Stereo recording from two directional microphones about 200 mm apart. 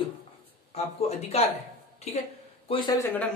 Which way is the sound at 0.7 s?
30° left (ahead or behind).